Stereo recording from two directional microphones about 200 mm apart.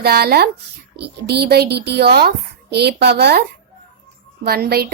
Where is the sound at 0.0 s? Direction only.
50° right (ahead or behind).